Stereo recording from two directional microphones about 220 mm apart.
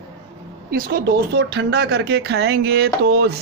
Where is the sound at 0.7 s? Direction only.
40° right (ahead or behind).